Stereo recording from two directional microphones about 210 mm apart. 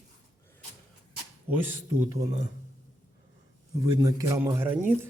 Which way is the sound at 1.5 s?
10° right (ahead or behind).